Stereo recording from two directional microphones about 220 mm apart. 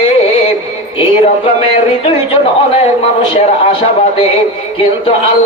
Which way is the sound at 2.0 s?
25° left (ahead or behind).